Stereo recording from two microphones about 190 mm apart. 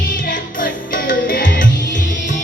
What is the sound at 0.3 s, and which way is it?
Music, 45° left (ahead or behind).